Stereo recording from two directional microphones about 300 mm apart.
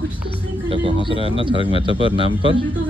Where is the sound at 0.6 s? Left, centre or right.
Centre.